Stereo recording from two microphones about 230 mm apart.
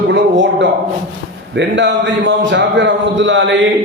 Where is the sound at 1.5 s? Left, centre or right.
Right.